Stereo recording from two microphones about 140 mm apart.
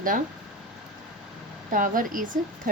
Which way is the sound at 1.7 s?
75° right (ahead or behind).